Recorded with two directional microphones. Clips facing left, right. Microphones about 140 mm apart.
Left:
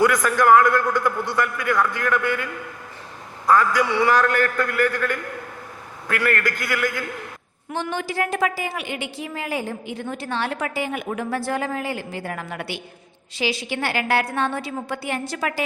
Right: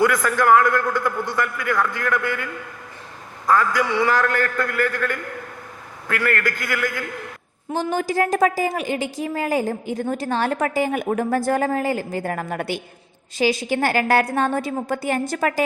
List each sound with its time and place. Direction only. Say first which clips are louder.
0.0 s a man's voice: left 1 dB; 15° left (ahead or behind)
7.7 s a woman's voice: right 4 dB; 40° right (ahead or behind)